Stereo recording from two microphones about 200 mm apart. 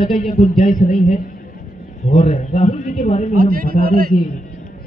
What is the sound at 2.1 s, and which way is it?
A man's voice, 40° left (ahead or behind).